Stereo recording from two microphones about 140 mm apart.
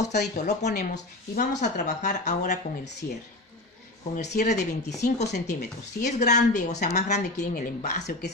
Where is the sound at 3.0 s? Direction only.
90° left.